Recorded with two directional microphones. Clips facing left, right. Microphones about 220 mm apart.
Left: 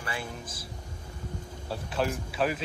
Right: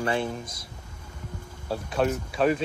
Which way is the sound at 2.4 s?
35° right (ahead or behind).